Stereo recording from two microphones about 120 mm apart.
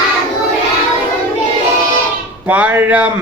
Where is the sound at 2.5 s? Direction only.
15° right (ahead or behind).